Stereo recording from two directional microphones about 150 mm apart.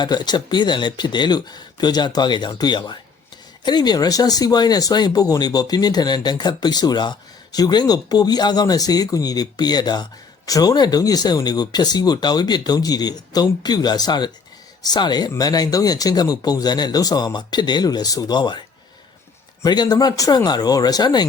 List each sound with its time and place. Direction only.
0.0 s speech: 30° left (ahead or behind)
19.6 s speech: 25° left (ahead or behind)